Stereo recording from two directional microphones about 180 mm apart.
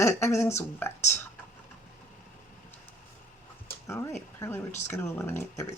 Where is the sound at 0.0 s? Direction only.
15° left (ahead or behind).